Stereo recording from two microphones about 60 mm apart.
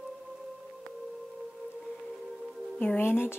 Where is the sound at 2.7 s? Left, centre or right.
Left.